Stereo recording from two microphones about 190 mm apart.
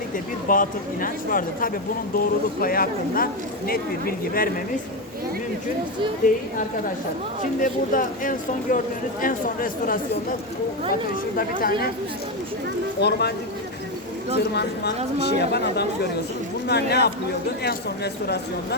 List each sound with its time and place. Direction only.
0.4 s speech: 45° left (ahead or behind)
6.2 s speech: 45° left (ahead or behind)
11.3 s speech: 50° left (ahead or behind)
13.0 s speech: 60° left (ahead or behind)
14.3 s speech: 60° left (ahead or behind)